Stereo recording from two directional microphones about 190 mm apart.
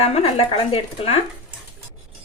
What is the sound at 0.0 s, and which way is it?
Speech, 30° left (ahead or behind).